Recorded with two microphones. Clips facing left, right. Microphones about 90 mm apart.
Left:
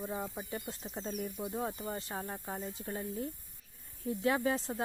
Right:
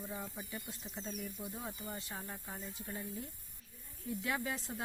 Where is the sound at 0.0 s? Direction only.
40° left (ahead or behind).